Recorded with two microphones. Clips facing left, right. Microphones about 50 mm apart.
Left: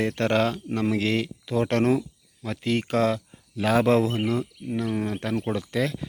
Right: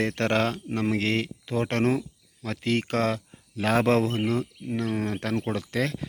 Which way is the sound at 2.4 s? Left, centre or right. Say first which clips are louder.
Even; right.